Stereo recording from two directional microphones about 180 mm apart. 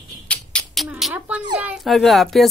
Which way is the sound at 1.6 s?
Centre (ahead or behind).